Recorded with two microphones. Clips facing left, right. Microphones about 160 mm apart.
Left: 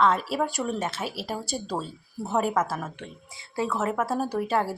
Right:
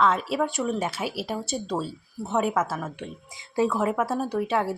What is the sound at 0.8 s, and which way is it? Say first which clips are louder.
Speech: right 2 dB; 10° right (ahead or behind).